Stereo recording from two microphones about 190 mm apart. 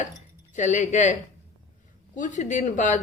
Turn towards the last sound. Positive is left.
turn(degrees=40)  # may be behind; listen again after turning